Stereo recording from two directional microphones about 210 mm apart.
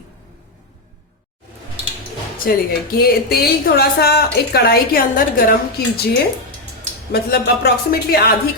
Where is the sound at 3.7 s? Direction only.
50° left (ahead or behind).